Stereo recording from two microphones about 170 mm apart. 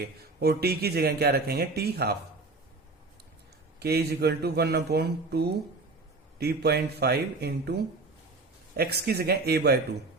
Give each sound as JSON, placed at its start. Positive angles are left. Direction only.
{"t": 0.0, "sound": "speech", "side_deg": -70}
{"t": 3.8, "sound": "speech", "side_deg": -70}